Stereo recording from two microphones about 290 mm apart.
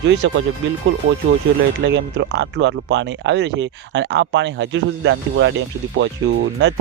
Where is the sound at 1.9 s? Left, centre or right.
Right.